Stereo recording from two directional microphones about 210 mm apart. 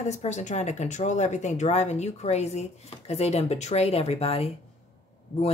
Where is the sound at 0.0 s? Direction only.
35° left (ahead or behind).